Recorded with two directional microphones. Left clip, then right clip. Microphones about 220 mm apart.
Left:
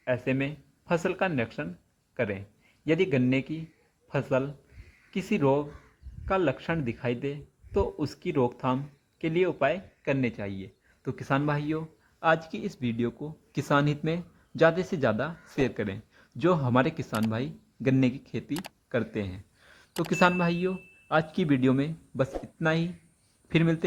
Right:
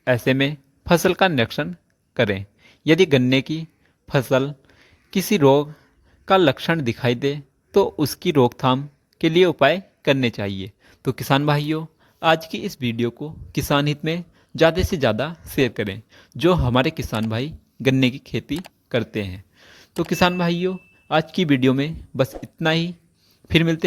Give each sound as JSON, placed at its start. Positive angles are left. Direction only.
{"t": 0.0, "sound": "speech", "side_deg": -45}
{"t": 18.9, "sound": "a sound", "side_deg": -30}
{"t": 20.1, "sound": "speech", "side_deg": -25}